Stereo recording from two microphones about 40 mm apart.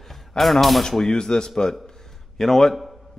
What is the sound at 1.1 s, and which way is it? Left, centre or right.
Speech, centre.